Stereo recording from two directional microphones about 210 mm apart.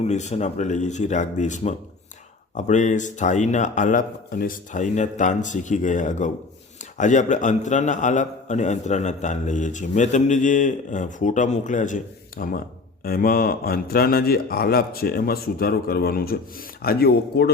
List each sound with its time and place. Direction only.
0.0 s a man's voice: 30° left (ahead or behind); by 17.5 s 50° left (ahead or behind)